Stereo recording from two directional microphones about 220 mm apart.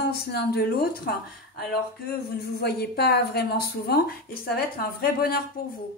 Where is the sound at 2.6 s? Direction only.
45° left (ahead or behind).